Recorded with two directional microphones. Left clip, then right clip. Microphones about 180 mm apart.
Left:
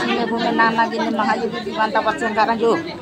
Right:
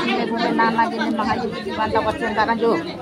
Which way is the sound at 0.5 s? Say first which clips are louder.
Left 2 dB; 15° right (ahead or behind).